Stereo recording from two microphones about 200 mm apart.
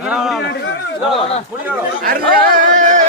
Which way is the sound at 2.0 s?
45° right (ahead or behind).